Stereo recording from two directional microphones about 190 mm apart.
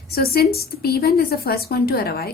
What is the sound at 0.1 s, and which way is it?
A woman's voice, 55° left (ahead or behind).